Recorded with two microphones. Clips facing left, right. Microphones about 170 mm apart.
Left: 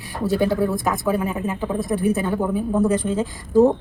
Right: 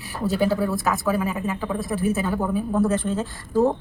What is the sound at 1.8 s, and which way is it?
Speech, centre (ahead or behind).